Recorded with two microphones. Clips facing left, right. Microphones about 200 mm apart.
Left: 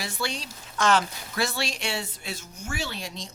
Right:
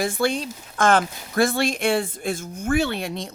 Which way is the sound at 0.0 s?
50° right (ahead or behind).